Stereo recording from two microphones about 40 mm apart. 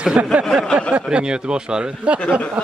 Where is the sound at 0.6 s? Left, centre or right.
Centre.